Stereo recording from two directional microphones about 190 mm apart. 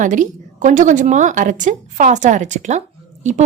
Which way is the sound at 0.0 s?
40° right (ahead or behind).